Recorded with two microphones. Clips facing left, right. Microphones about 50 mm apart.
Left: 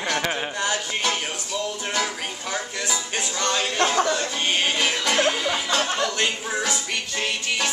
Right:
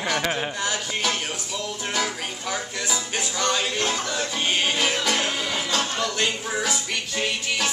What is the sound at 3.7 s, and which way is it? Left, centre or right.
Speech, left.